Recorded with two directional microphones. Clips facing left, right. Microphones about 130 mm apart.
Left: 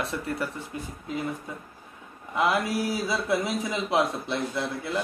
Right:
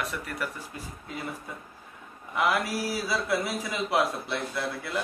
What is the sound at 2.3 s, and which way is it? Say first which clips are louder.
Speech: left 2 dB; 20° left (ahead or behind).